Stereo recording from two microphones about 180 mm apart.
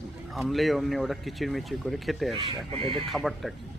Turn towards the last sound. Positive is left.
turn(degrees=0)  # may be behind; listen again after turning